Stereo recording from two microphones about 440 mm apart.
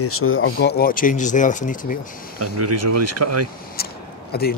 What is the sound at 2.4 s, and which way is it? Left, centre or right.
Speech, right.